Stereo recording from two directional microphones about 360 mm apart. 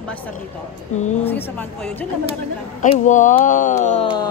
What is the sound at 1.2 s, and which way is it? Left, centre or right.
Speech, centre.